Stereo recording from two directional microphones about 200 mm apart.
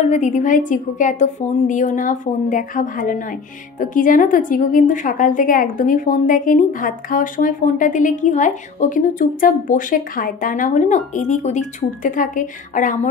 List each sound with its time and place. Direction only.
0.0 s a woman's voice: 35° left (ahead or behind)